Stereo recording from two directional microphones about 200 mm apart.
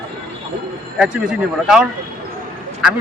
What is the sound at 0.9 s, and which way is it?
Speech, 5° right (ahead or behind).